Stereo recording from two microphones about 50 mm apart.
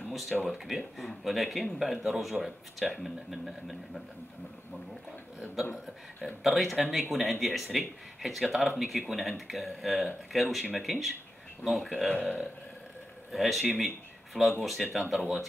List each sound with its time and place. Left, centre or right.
0.0 s a sound: centre
0.5 s speech: centre
5.6 s speech: centre
12.1 s speech: left
13.3 s speech: centre